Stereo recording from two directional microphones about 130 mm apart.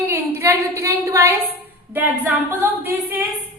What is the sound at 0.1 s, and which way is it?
A woman's voice, 20° right (ahead or behind).